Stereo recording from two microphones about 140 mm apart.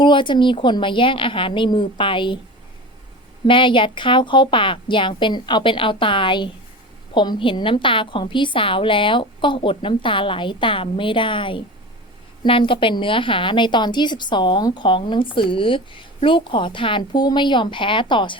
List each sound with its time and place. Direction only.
0.0 s a woman's voice: 35° left (ahead or behind)
3.4 s a woman's voice: 35° left (ahead or behind)